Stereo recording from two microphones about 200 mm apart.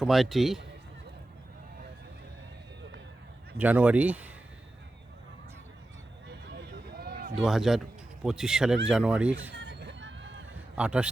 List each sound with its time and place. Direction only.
0.0 s a man's voice: centre (ahead or behind)
3.6 s speech: 10° right (ahead or behind)
6.7 s a sound: 50° right (ahead or behind)
7.3 s a man's voice: centre (ahead or behind)
9.5 s vehicle: 60° right (ahead or behind)
10.8 s a man's voice: 5° right (ahead or behind)